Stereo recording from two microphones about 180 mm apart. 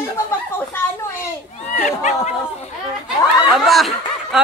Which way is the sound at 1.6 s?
40° left (ahead or behind).